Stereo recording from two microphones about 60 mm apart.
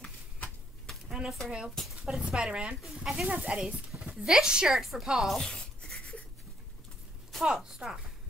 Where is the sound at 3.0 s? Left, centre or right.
Centre.